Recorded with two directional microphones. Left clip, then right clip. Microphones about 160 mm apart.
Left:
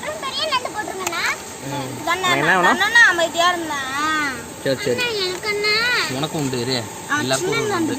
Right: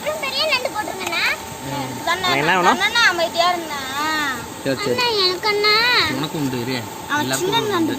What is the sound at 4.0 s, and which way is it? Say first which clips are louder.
Speech: even; 5° right (ahead or behind).